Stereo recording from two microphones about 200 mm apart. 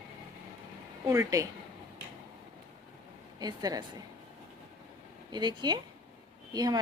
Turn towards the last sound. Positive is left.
turn(degrees=-20)  # may be behind; listen again after turning